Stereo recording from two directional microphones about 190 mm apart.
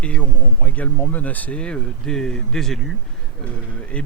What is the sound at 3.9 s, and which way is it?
Speech, 5° left (ahead or behind).